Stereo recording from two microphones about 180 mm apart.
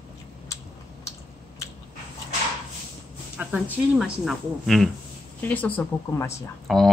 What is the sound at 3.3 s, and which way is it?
Speech, 10° right (ahead or behind).